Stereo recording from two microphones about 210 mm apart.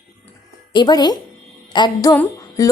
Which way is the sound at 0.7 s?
20° left (ahead or behind).